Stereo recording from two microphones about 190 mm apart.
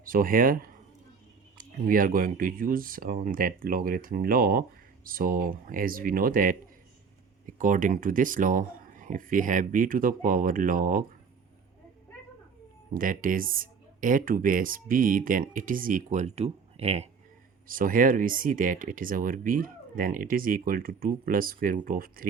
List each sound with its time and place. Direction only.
0.0 s speech: 50° right (ahead or behind)
12.9 s speech: 45° right (ahead or behind)
17.7 s speech: 45° right (ahead or behind)